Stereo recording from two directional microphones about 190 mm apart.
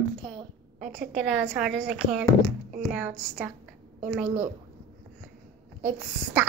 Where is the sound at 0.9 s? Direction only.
5° right (ahead or behind).